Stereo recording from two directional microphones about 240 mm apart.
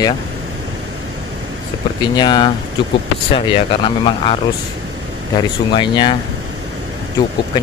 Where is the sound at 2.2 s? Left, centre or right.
Centre.